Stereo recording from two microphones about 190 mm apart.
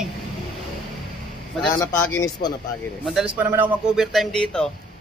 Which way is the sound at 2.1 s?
20° left (ahead or behind).